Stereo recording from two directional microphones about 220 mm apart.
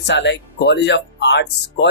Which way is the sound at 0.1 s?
55° left (ahead or behind).